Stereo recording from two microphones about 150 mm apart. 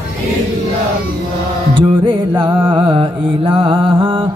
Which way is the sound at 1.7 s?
35° right (ahead or behind).